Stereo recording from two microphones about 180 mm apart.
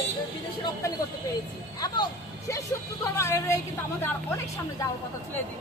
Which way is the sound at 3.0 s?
15° left (ahead or behind).